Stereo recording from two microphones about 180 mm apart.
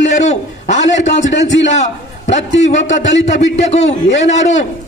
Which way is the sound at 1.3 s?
80° left.